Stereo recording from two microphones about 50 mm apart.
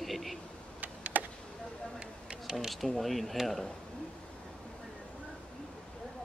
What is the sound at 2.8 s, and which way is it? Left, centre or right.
Speech, centre.